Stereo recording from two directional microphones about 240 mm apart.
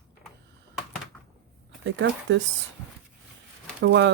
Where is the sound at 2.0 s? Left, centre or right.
Right.